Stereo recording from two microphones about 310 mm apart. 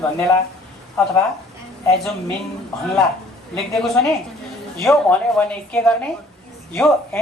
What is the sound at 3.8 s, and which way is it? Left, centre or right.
A man's voice, centre.